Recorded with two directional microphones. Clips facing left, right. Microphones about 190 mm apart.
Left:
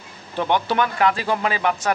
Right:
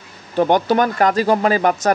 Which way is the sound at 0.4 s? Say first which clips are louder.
Right 6 dB; 45° right (ahead or behind).